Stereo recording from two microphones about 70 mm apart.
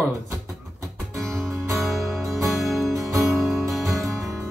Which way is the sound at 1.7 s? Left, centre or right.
Centre.